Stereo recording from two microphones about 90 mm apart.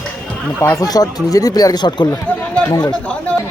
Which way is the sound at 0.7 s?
45° left (ahead or behind).